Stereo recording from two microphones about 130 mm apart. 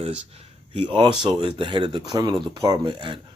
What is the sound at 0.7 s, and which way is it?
Speech, 40° right (ahead or behind).